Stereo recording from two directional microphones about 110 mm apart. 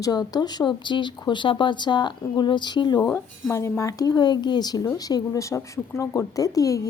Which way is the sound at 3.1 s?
25° left (ahead or behind).